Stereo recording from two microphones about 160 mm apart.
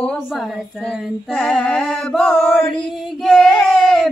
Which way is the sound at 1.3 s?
5° left (ahead or behind).